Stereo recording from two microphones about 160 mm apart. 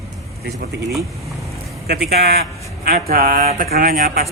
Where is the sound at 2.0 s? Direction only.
80° right.